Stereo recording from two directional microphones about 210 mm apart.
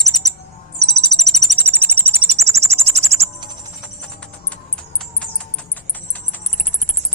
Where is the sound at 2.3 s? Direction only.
30° right (ahead or behind).